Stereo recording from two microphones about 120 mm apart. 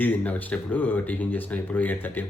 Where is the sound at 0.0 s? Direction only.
15° left (ahead or behind).